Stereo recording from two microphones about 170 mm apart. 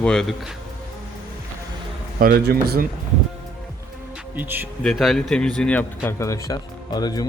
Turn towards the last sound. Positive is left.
turn(degrees=25)  # may be behind; listen again after turning